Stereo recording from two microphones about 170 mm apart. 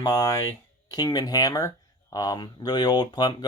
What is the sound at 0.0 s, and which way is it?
Speech, 20° left (ahead or behind).